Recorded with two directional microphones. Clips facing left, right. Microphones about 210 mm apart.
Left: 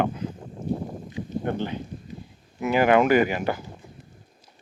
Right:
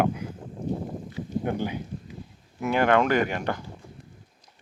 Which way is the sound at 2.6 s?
5° left (ahead or behind).